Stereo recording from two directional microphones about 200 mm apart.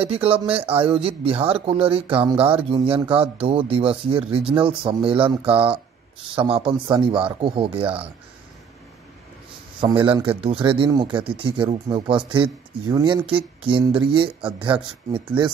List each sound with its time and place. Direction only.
0.0 s speech: 30° right (ahead or behind)
9.8 s speech: 25° right (ahead or behind)